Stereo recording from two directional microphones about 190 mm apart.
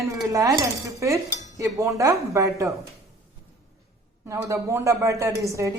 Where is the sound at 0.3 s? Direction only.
15° right (ahead or behind).